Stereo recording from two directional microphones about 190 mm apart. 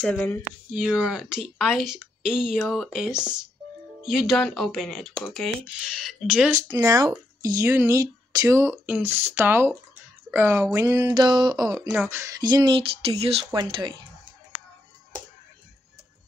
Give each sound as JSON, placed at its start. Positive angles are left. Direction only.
{"t": 0.0, "sound": "speech", "side_deg": 10}
{"t": 0.7, "sound": "speech", "side_deg": -5}
{"t": 6.8, "sound": "speech", "side_deg": -20}